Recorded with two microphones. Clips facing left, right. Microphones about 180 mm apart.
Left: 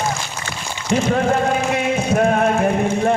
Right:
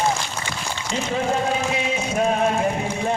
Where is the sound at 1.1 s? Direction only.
60° left (ahead or behind).